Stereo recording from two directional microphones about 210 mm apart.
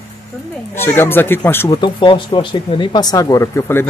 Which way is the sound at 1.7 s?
20° left (ahead or behind).